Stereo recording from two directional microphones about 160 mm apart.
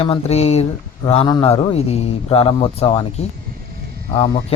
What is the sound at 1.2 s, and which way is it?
Speech, 25° left (ahead or behind).